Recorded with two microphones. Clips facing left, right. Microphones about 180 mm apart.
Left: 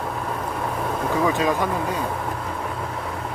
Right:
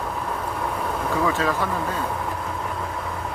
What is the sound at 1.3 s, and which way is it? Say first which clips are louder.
Speech: left 2 dB; 15° left (ahead or behind).